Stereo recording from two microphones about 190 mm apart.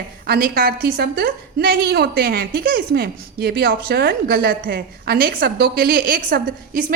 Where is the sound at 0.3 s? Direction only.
50° right (ahead or behind).